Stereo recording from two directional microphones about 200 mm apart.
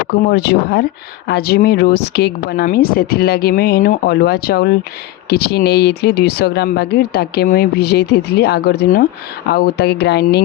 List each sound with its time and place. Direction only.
0.1 s speech: 55° left (ahead or behind)